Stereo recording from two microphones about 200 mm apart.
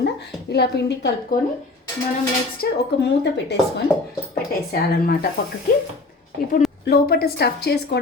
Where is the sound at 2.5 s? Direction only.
55° left (ahead or behind).